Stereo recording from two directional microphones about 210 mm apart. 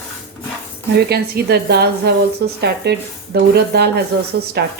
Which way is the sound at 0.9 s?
50° right (ahead or behind).